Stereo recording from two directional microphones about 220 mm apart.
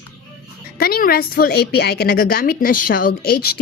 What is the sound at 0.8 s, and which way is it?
A woman's voice, 45° left (ahead or behind).